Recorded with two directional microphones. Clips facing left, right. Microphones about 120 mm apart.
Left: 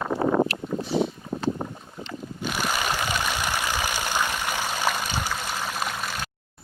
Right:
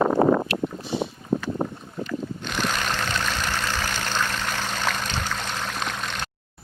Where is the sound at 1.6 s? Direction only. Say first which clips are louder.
Right 5 dB; 40° right (ahead or behind).